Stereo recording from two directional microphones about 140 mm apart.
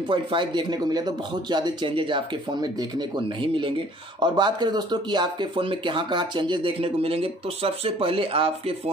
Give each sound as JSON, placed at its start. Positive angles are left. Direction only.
{"t": 0.1, "sound": "speech", "side_deg": -35}